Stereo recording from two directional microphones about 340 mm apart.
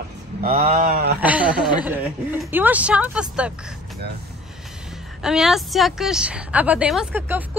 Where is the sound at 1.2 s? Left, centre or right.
Centre.